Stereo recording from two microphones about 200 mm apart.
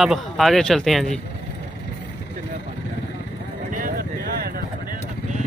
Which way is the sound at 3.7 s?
45° right (ahead or behind).